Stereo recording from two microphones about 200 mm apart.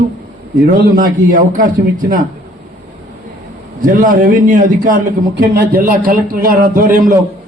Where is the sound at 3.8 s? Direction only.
40° right (ahead or behind).